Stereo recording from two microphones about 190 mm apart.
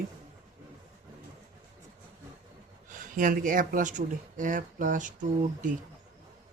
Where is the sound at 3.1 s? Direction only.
45° right (ahead or behind).